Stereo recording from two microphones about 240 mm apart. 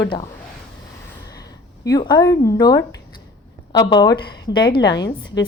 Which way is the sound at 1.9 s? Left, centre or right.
Centre.